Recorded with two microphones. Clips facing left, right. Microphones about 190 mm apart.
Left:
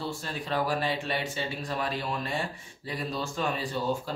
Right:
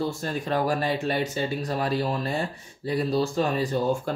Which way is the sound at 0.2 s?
45° right (ahead or behind).